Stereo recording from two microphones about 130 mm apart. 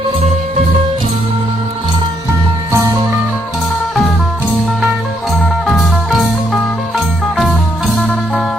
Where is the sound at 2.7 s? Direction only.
20° right (ahead or behind).